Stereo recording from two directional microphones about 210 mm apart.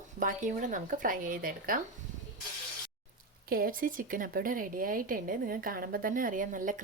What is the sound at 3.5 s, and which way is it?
Speech, 45° right (ahead or behind).